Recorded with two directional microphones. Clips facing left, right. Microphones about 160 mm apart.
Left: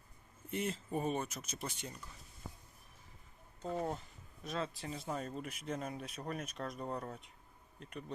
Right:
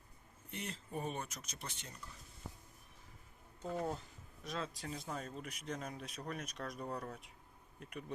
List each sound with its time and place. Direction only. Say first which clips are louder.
0.5 s speech: left 7 dB; 5° left (ahead or behind)
3.7 s speech: left 1 dB; centre (ahead or behind)
6.8 s speech: left 1 dB; 20° left (ahead or behind)
7.8 s speech: left 1 dB; 5° right (ahead or behind)